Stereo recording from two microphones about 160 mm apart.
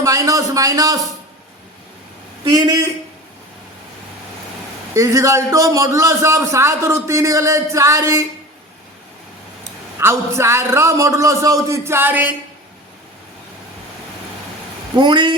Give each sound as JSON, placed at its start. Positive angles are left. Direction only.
{"t": 0.0, "sound": "a man's voice", "side_deg": -20}
{"t": 2.5, "sound": "a man's voice", "side_deg": -25}
{"t": 4.9, "sound": "a man's voice", "side_deg": -20}
{"t": 10.0, "sound": "a man's voice", "side_deg": -15}
{"t": 14.9, "sound": "a man's voice", "side_deg": -30}